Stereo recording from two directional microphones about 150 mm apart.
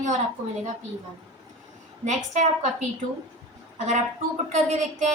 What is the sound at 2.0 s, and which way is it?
Speech, 50° right (ahead or behind).